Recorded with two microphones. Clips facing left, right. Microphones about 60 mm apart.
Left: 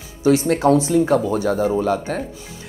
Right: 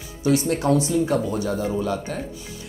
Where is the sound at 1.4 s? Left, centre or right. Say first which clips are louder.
Left 5 dB; left.